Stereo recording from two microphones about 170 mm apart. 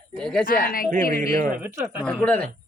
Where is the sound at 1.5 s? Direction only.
15° right (ahead or behind).